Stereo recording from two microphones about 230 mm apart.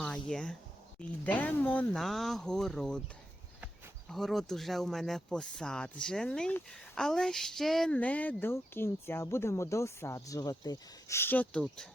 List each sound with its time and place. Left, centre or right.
0.0 s a sound: centre
1.2 s speech: centre
4.1 s speech: centre